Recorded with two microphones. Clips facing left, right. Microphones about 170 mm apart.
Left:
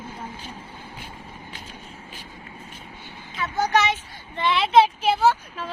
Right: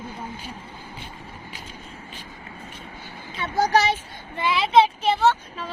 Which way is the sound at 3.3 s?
35° right (ahead or behind).